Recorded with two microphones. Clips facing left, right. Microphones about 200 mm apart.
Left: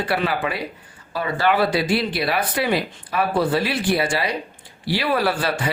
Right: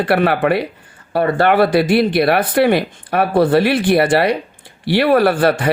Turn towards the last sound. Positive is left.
turn(degrees=-55)  # may be behind; listen again after turning